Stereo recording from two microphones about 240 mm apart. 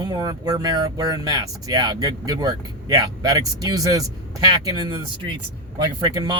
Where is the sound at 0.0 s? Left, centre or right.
Centre.